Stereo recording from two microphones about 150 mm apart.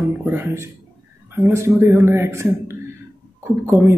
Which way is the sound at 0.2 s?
15° right (ahead or behind).